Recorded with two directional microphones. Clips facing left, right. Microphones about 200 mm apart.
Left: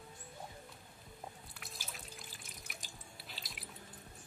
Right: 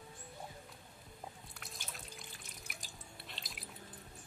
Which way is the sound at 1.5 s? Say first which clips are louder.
Even; 5° left (ahead or behind).